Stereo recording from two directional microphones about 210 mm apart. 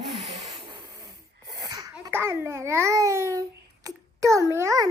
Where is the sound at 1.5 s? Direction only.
20° right (ahead or behind).